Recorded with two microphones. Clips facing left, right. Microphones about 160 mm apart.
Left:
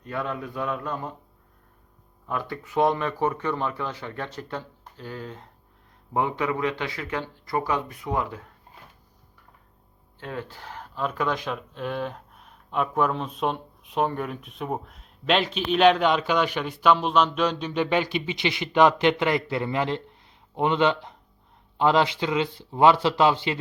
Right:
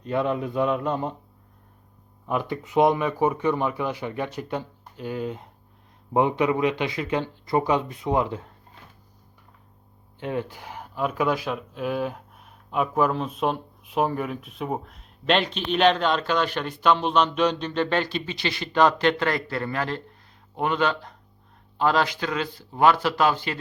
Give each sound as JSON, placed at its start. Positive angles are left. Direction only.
{"t": 0.0, "sound": "speech", "side_deg": -20}
{"t": 2.2, "sound": "speech", "side_deg": -20}
{"t": 10.2, "sound": "a man's voice", "side_deg": -20}